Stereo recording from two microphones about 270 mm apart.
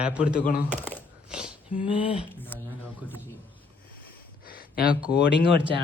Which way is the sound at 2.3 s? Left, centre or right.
Centre.